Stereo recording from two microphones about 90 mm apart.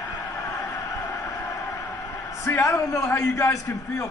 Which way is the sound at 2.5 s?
30° left (ahead or behind).